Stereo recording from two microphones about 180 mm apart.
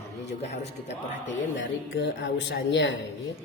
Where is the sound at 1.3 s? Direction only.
90° left.